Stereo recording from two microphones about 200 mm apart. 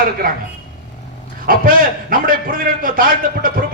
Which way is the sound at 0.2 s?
45° right (ahead or behind).